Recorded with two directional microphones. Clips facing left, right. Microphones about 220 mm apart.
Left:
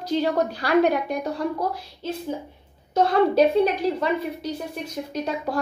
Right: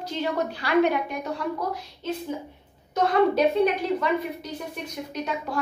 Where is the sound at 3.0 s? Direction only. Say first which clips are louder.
Left 3 dB; 30° left (ahead or behind).